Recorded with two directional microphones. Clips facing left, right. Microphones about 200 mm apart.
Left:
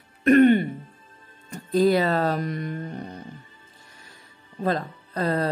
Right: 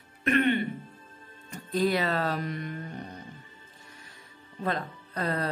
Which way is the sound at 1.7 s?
40° left (ahead or behind).